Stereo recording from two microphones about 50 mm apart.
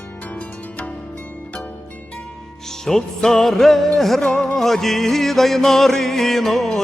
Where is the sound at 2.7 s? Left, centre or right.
Centre.